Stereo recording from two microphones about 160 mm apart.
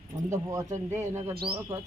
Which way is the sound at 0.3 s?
20° right (ahead or behind).